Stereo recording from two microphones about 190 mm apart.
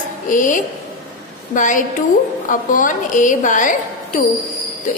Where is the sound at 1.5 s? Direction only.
45° left (ahead or behind).